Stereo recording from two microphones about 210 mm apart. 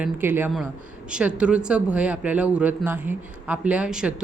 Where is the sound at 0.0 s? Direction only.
10° right (ahead or behind).